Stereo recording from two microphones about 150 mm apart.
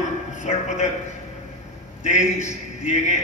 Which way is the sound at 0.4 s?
50° left (ahead or behind).